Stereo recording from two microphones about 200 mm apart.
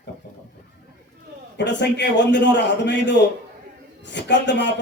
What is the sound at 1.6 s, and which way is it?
A man's voice, 60° left (ahead or behind).